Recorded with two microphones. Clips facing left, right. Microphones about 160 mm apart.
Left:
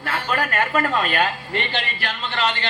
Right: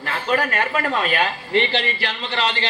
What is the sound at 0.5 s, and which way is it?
A man's voice, 45° left (ahead or behind).